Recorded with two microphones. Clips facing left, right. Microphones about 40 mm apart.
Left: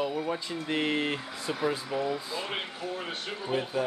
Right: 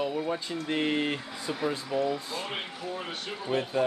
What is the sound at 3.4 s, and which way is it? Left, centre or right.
Speech, centre.